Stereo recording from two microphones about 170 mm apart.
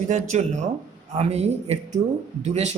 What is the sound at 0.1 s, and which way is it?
A woman's voice, 45° right (ahead or behind).